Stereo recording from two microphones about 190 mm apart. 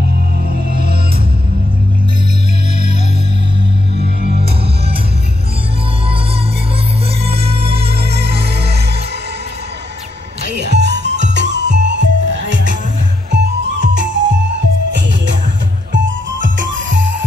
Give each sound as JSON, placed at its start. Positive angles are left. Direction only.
{"t": 3.9, "sound": "music", "side_deg": 35}
{"t": 7.9, "sound": "music", "side_deg": -60}
{"t": 10.4, "sound": "music", "side_deg": -65}